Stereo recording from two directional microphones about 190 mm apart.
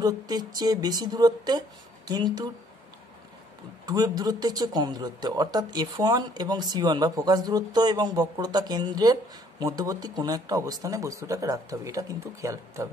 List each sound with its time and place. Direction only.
0.0 s speech: 20° right (ahead or behind)
3.8 s speech: 20° right (ahead or behind)